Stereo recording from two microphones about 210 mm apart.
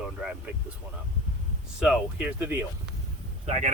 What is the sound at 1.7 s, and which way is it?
Speech, 5° right (ahead or behind).